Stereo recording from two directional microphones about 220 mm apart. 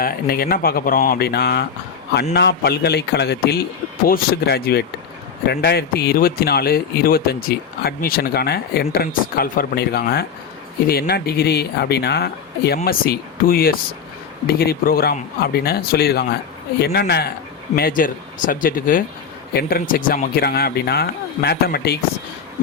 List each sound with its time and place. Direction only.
0.0 s speech: 40° left (ahead or behind)